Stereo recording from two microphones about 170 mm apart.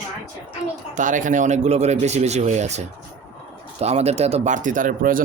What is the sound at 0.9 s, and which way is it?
A child's voice, 50° right (ahead or behind).